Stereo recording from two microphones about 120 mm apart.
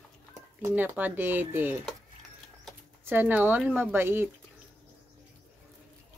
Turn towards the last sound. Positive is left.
turn(degrees=-20)  # may be behind; listen again after turning